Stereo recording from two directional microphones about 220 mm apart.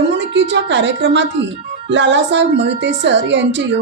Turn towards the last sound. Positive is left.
turn(degrees=-55)  # may be behind; listen again after turning